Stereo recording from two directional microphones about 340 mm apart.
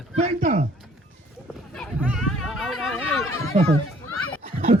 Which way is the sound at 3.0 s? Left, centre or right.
Left.